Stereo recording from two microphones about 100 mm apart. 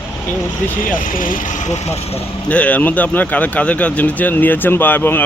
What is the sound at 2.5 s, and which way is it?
Speech, 15° left (ahead or behind).